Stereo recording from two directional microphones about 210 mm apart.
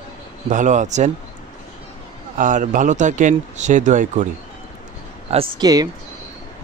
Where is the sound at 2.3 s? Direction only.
40° right (ahead or behind).